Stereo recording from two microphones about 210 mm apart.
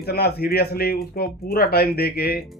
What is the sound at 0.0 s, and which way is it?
A man's voice, 50° left (ahead or behind).